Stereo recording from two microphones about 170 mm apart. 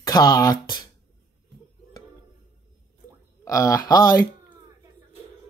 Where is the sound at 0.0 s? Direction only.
20° left (ahead or behind).